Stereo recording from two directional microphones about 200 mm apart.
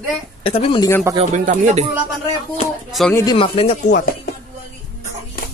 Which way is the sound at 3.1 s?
20° left (ahead or behind).